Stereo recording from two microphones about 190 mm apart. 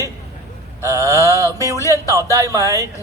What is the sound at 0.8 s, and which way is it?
A woman's voice, 15° right (ahead or behind).